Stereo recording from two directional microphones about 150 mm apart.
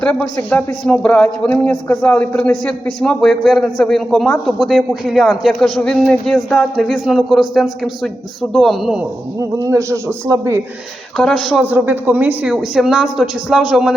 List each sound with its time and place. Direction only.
0.0 s a man's voice: 5° left (ahead or behind)
9.4 s a man's voice: 20° right (ahead or behind)
11.2 s a man's voice: 5° left (ahead or behind)
11.6 s a man's voice: 10° right (ahead or behind)